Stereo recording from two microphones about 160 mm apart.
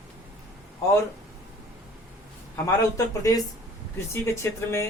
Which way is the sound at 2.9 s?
20° left (ahead or behind).